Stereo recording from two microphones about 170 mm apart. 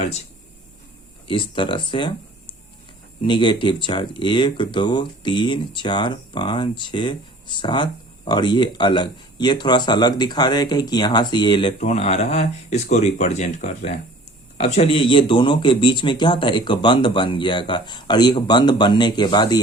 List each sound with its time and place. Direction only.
0.0 s speech: 40° left (ahead or behind)
1.3 s speech: 30° left (ahead or behind)
11.8 s speech: 40° left (ahead or behind)